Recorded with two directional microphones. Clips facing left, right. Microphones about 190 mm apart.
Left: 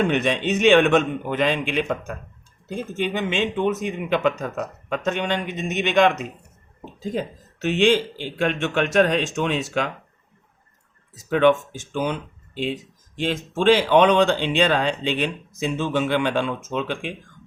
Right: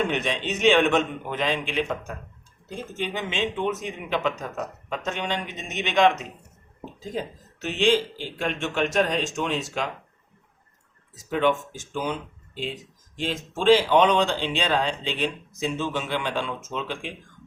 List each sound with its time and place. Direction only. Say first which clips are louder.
0.1 s speech: left 6 dB; 55° left (ahead or behind)
7.1 s speech: left 4 dB; 65° left (ahead or behind)
11.3 s speech: left 6 dB; 70° left (ahead or behind)
13.1 s speech: left 5 dB; 65° left (ahead or behind)